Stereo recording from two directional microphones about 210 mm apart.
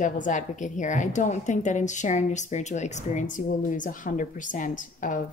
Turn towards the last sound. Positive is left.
turn(degrees=40)  # may be behind; listen again after turning